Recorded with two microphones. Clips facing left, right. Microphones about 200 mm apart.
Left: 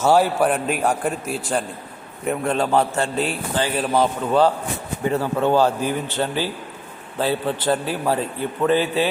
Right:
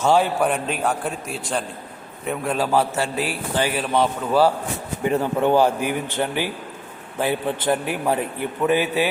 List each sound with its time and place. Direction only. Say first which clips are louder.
0.0 s a man's voice: left 2 dB; 5° left (ahead or behind)
5.0 s a man's voice: even; 15° right (ahead or behind)